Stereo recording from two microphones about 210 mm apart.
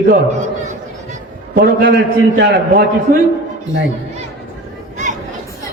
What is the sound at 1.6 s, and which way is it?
A man's voice, 50° right (ahead or behind).